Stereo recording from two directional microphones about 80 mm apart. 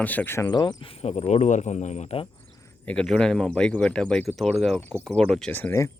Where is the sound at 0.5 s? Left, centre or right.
Left.